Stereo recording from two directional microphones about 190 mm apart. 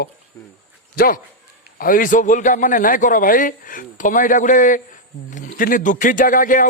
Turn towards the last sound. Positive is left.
turn(degrees=45)  # may be behind; listen again after turning